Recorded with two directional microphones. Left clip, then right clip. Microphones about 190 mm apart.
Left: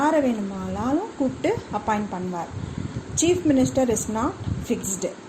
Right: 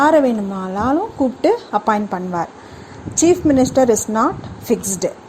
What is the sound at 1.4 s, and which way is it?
A woman's voice, 40° right (ahead or behind).